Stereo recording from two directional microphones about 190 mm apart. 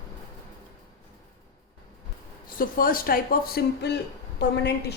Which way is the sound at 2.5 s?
50° left (ahead or behind).